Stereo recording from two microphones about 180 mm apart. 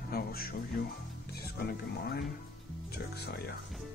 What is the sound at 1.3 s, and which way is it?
Speech, 60° left (ahead or behind).